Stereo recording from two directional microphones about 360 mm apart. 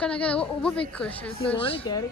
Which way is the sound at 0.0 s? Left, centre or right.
Centre.